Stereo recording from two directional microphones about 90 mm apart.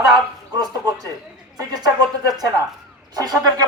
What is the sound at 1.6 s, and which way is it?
Speech, 45° right (ahead or behind).